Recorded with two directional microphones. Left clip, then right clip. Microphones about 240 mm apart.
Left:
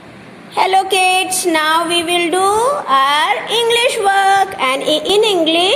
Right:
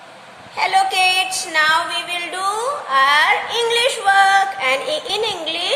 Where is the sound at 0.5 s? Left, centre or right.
Left.